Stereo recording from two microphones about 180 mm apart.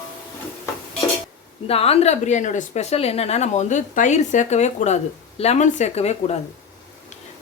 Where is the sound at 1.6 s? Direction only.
35° left (ahead or behind).